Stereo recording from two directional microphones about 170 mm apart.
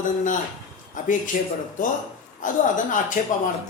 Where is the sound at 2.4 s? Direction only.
50° left (ahead or behind).